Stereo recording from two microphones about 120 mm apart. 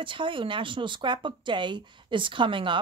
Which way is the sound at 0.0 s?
45° right (ahead or behind).